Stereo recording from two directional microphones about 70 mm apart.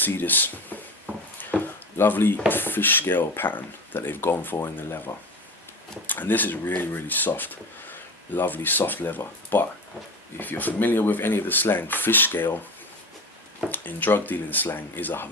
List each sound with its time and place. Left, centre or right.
0.0 s speech: left
1.4 s a sound: left
2.5 s speech: left
13.7 s speech: left